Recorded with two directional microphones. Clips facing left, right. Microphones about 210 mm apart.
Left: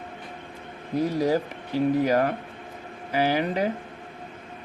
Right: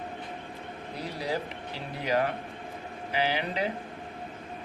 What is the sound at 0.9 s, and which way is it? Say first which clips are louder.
Speech: left 10 dB; 45° left (ahead or behind).